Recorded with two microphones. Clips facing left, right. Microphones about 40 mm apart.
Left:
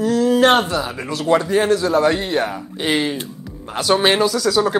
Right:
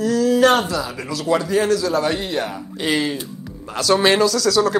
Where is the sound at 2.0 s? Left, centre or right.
Left; by 4.7 s centre.